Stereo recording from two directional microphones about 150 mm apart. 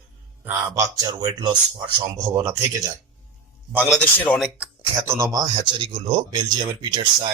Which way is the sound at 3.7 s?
10° right (ahead or behind).